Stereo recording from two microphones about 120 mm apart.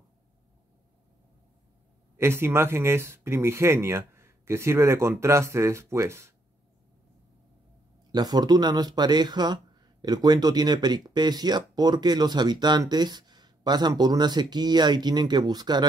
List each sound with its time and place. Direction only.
2.1 s speech: 20° right (ahead or behind)
8.1 s speech: 35° right (ahead or behind)